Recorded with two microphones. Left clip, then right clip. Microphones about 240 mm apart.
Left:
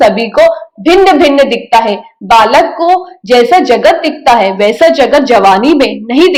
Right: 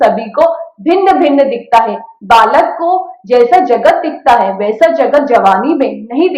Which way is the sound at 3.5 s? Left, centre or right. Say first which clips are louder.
Left 2 dB; left.